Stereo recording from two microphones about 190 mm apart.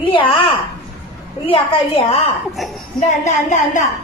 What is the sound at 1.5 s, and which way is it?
Speech, 30° left (ahead or behind).